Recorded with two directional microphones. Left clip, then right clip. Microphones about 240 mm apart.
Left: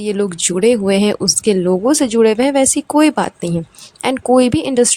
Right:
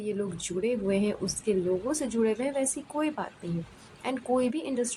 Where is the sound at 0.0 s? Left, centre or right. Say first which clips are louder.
Left 15 dB; left.